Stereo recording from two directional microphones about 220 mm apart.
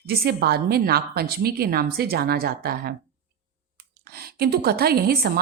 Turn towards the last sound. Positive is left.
turn(degrees=-45)  # may be behind; listen again after turning